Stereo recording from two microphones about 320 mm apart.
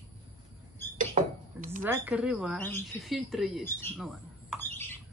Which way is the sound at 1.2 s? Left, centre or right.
Right.